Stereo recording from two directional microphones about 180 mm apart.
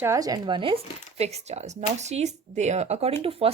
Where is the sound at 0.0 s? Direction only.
20° right (ahead or behind).